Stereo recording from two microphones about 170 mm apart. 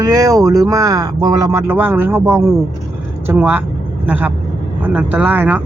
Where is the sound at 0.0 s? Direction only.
20° right (ahead or behind).